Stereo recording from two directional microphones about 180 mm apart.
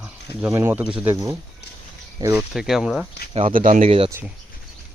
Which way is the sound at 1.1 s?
20° right (ahead or behind).